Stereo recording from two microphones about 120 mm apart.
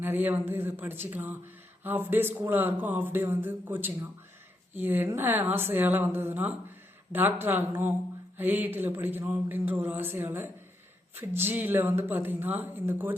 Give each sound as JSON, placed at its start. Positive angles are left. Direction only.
{"t": 0.0, "sound": "speech", "side_deg": -15}